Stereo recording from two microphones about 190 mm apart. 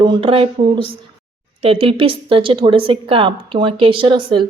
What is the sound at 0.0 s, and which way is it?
A woman's voice, 25° right (ahead or behind).